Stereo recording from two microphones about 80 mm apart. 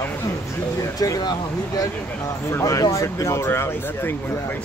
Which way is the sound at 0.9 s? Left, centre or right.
Left.